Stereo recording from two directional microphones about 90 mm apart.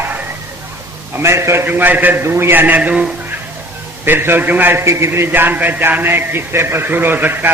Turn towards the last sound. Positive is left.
turn(degrees=-20)  # may be behind; listen again after turning